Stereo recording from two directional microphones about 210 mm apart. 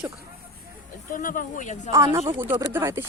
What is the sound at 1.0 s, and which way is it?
Speech, 40° left (ahead or behind).